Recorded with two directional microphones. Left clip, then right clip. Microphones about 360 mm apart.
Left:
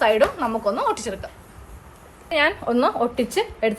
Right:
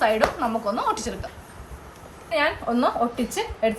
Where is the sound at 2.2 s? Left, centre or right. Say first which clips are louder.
Left 3 dB; centre.